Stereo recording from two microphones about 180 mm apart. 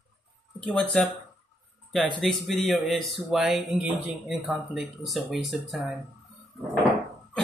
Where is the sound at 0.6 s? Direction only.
5° left (ahead or behind).